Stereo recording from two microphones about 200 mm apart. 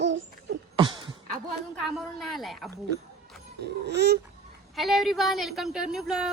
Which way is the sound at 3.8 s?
55° right (ahead or behind).